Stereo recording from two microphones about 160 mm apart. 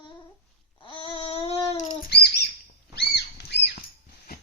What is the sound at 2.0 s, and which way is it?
Bird, 90° left.